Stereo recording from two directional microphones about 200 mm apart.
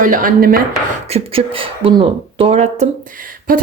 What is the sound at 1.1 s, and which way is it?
Speech, 25° right (ahead or behind).